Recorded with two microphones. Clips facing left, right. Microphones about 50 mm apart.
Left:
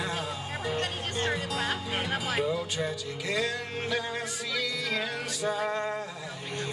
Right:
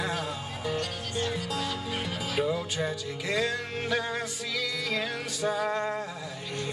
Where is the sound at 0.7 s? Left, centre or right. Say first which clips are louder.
Left 1 dB; left.